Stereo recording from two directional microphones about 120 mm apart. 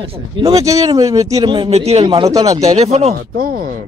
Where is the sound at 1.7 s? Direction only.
60° right (ahead or behind).